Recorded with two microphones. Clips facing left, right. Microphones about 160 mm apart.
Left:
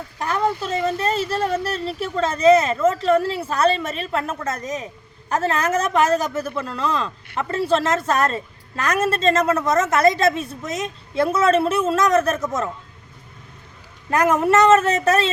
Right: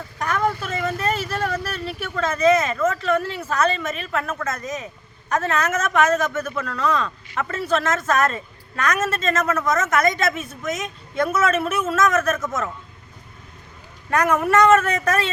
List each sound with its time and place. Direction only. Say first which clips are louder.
0.2 s a woman's voice: left 1 dB; 30° left (ahead or behind)
14.2 s speech: left 1 dB; 25° left (ahead or behind)